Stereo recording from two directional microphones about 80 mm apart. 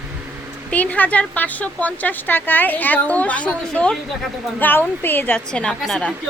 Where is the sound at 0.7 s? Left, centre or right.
Centre.